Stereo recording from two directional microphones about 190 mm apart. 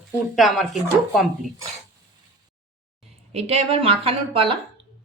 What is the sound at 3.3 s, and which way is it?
A woman's voice, 35° right (ahead or behind).